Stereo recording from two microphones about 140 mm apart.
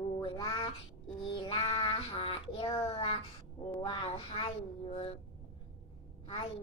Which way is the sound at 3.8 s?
35° left (ahead or behind).